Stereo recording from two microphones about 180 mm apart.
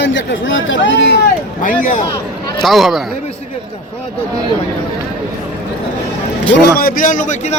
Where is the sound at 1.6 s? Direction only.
45° left (ahead or behind).